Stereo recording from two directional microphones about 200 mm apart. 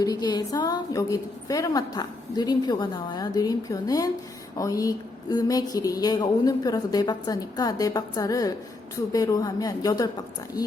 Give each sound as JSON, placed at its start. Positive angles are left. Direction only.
{"t": 0.0, "sound": "a woman's voice", "side_deg": 20}